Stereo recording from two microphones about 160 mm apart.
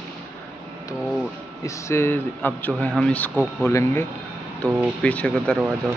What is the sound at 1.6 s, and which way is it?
Speech, 15° left (ahead or behind).